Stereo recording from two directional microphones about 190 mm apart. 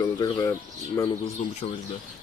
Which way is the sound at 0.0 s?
20° left (ahead or behind).